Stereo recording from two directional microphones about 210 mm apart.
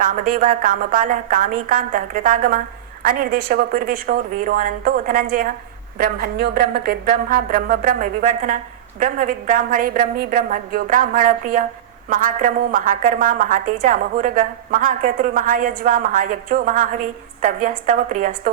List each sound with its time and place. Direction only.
0.0 s a woman's voice: 40° right (ahead or behind)